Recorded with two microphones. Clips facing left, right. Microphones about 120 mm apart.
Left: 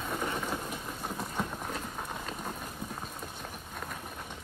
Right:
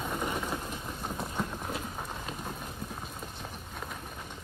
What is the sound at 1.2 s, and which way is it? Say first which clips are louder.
Run: even; centre (ahead or behind).